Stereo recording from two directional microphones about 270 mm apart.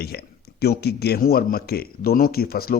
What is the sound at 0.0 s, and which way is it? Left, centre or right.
Speech, left.